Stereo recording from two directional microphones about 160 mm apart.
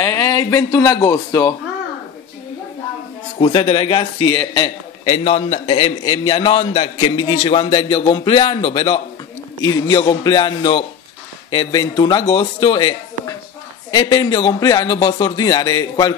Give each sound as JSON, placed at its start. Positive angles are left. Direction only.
{"t": 0.0, "sound": "speech", "side_deg": 15}
{"t": 3.3, "sound": "a man's voice", "side_deg": 35}